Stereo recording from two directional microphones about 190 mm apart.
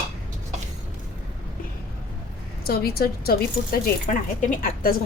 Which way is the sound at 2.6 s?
55° left (ahead or behind).